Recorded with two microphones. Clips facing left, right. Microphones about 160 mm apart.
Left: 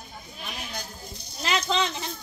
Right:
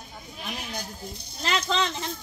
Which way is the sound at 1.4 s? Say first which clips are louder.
Even; 5° left (ahead or behind).